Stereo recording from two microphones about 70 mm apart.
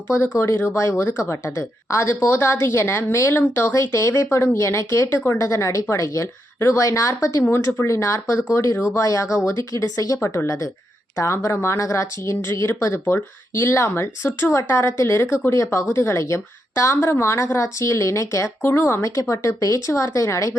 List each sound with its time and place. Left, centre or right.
0.2 s speech: left
3.7 s speech: left
7.5 s speech: left
19.1 s speech: left